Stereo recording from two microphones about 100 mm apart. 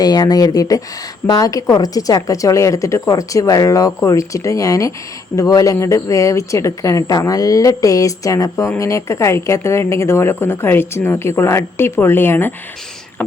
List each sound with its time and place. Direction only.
0.0 s speech: 40° left (ahead or behind); by 12.5 s 20° left (ahead or behind)